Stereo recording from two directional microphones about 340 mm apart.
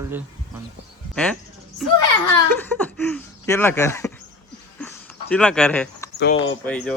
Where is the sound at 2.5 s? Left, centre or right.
Centre.